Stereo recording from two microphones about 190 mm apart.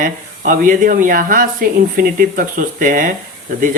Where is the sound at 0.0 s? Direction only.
45° right (ahead or behind).